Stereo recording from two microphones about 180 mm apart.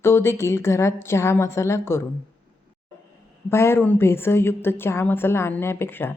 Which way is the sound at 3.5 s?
15° left (ahead or behind).